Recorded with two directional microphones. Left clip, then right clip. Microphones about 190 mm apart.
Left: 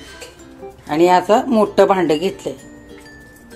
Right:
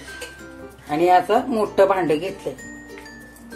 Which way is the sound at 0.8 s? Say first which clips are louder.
Left 3 dB; 40° left (ahead or behind).